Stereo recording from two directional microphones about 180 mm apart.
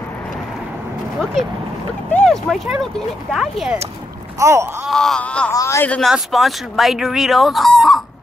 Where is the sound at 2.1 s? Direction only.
5° left (ahead or behind).